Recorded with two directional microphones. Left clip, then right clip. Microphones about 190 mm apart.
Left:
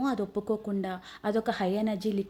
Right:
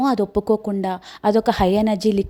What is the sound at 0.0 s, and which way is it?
A woman's voice, 40° right (ahead or behind).